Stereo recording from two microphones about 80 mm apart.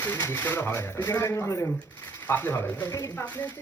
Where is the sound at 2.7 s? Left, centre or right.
Left.